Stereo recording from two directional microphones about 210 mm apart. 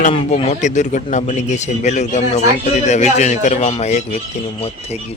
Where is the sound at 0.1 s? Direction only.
25° left (ahead or behind).